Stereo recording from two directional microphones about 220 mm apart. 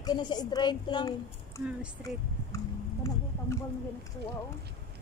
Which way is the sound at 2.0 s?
15° left (ahead or behind).